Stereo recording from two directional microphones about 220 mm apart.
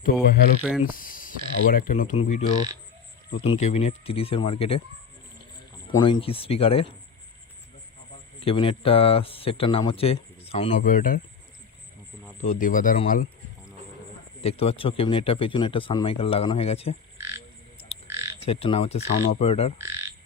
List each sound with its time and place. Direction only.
0.0 s speech: 45° left (ahead or behind)
0.6 s speech: 5° right (ahead or behind)
0.9 s a sound: 40° left (ahead or behind)
1.7 s speech: 35° left (ahead or behind)
6.0 s speech: 25° left (ahead or behind)
8.4 s speech: 25° left (ahead or behind)
12.4 s speech: 35° left (ahead or behind)
14.4 s speech: 25° left (ahead or behind)
17.2 s frog: 10° right (ahead or behind)
18.4 s speech: 25° left (ahead or behind)
19.8 s frog: 10° right (ahead or behind)